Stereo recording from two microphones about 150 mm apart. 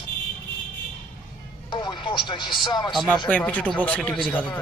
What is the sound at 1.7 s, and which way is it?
Speech, 30° left (ahead or behind).